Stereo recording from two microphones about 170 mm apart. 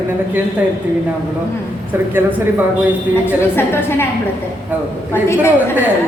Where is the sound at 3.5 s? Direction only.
15° left (ahead or behind).